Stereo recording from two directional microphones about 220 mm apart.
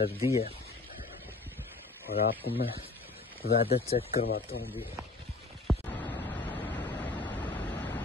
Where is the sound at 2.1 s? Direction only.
45° left (ahead or behind).